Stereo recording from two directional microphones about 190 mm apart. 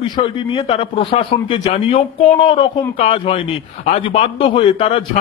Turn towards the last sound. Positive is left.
turn(degrees=30)  # may be behind; listen again after turning